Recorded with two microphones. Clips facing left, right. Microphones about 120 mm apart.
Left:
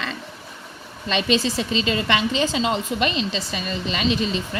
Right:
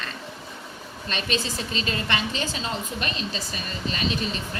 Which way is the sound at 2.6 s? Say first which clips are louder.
Left 8 dB; 90° left.